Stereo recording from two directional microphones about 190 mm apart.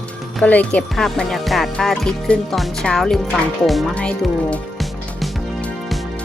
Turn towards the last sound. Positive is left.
turn(degrees=0)  # may be behind; listen again after turning